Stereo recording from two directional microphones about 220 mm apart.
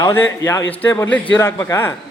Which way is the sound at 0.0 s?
10° left (ahead or behind).